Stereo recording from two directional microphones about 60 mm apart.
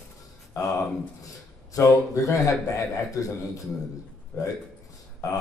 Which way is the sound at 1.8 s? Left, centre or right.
Left.